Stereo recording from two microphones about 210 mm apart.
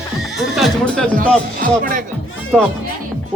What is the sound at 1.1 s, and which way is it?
Speech, 40° right (ahead or behind).